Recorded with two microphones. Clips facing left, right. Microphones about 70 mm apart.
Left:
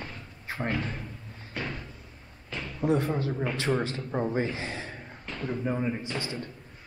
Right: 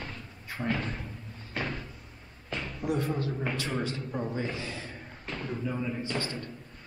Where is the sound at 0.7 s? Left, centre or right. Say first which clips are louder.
Right 2 dB; centre.